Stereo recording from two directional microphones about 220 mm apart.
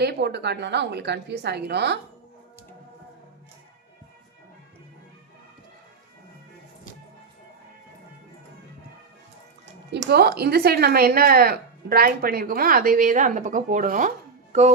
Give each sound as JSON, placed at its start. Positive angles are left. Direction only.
{"t": 0.0, "sound": "speech", "side_deg": -50}
{"t": 10.1, "sound": "speech", "side_deg": -45}
{"t": 14.5, "sound": "music", "side_deg": -30}